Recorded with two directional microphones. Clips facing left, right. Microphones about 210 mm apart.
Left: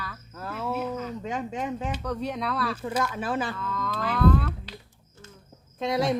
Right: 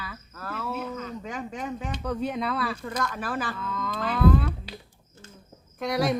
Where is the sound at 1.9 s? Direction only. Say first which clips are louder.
Right 1 dB; centre (ahead or behind).